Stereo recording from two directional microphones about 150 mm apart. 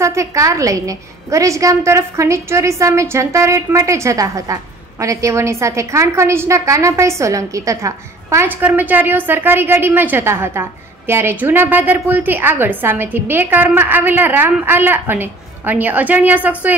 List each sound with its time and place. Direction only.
0.0 s a woman's voice: 20° right (ahead or behind)